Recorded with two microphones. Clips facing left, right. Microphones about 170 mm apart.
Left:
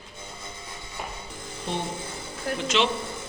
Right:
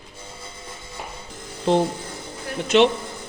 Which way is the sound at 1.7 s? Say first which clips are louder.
Right 12 dB; 90° right.